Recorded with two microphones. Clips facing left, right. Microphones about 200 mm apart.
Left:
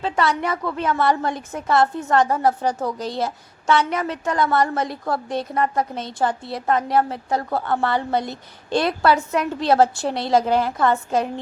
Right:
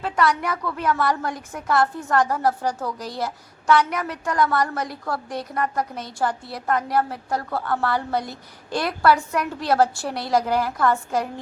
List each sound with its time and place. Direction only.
0.0 s a woman's voice: 25° left (ahead or behind)